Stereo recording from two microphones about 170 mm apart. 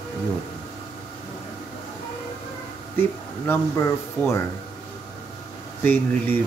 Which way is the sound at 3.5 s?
15° left (ahead or behind).